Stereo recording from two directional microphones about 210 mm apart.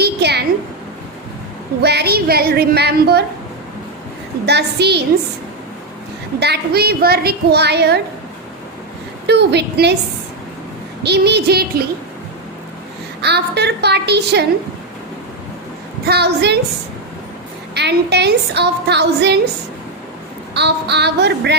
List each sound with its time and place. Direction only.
0.0 s a sound: 50° right (ahead or behind)
1.8 s a woman's voice: 50° right (ahead or behind)
4.4 s a woman's voice: 50° right (ahead or behind)
6.4 s a woman's voice: 50° right (ahead or behind)
9.2 s a woman's voice: 55° right (ahead or behind)
11.0 s a woman's voice: 50° right (ahead or behind)
13.2 s a woman's voice: 50° right (ahead or behind)
16.0 s a woman's voice: 50° right (ahead or behind)
17.7 s a woman's voice: 55° right (ahead or behind)
20.5 s a woman's voice: 55° right (ahead or behind)